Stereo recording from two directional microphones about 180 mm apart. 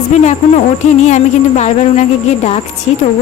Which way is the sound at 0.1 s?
40° left (ahead or behind).